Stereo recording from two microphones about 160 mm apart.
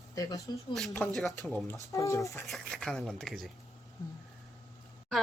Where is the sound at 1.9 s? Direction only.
20° left (ahead or behind).